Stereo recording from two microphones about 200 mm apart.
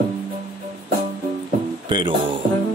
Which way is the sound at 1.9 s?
25° right (ahead or behind).